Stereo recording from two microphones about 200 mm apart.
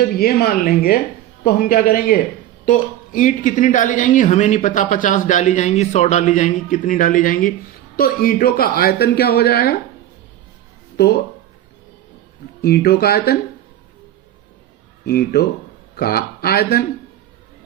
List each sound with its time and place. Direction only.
0.0 s a woman's voice: 50° left (ahead or behind)
10.9 s speech: 50° left (ahead or behind)
12.6 s speech: 50° left (ahead or behind)
15.0 s speech: 50° left (ahead or behind)